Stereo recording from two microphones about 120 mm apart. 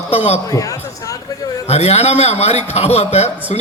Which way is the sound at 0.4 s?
30° left (ahead or behind).